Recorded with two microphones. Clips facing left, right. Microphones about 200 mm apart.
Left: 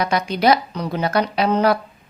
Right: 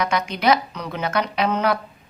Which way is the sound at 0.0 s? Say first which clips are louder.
Left 3 dB; 35° left (ahead or behind).